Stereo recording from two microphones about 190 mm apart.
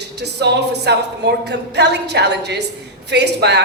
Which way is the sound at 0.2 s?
60° right (ahead or behind).